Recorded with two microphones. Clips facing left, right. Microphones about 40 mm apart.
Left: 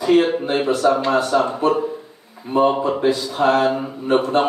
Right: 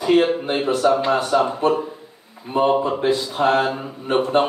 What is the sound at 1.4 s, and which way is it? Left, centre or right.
Mantra, centre.